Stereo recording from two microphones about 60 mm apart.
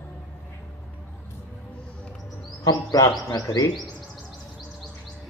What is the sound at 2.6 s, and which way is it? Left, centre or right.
Speech, left.